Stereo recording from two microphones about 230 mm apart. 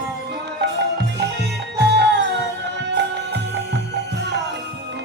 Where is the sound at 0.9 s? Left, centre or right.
Right.